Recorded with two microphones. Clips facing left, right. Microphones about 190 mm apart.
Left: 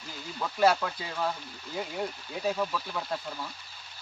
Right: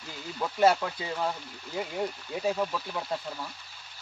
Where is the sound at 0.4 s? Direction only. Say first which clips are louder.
Right 1 dB; 20° right (ahead or behind).